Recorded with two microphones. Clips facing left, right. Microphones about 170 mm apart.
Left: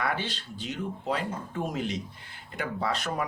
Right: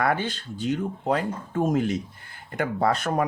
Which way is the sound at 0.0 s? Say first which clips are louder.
Right 6 dB; 50° right (ahead or behind).